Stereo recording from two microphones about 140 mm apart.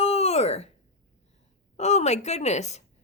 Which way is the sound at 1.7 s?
55° left (ahead or behind).